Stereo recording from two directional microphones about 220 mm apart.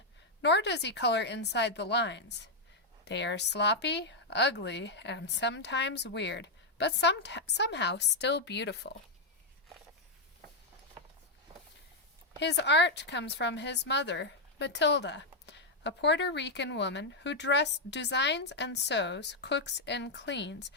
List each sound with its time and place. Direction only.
0.4 s a woman's voice: 50° left (ahead or behind)
11.5 s walk: 25° right (ahead or behind)
12.4 s a woman's voice: 50° left (ahead or behind)